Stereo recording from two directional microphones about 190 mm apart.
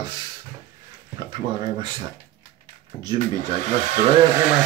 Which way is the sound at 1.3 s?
25° right (ahead or behind).